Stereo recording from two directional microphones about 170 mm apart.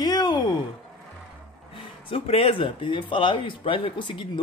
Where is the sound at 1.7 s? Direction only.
35° left (ahead or behind).